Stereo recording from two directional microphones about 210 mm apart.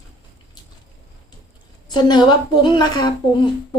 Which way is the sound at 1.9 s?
20° left (ahead or behind).